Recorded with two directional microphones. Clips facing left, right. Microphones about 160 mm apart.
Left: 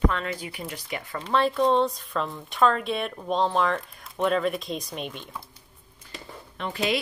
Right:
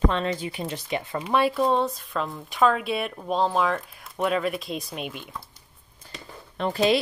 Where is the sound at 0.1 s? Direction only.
25° right (ahead or behind).